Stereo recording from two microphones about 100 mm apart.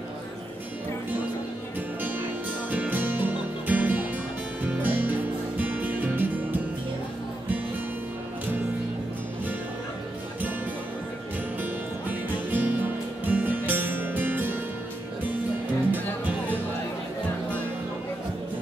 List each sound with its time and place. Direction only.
2.7 s music: 15° right (ahead or behind)
11.6 s music: 20° right (ahead or behind)
15.9 s music: 15° right (ahead or behind)